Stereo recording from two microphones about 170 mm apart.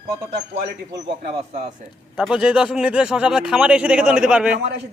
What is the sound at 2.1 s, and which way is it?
A man's voice, 5° right (ahead or behind).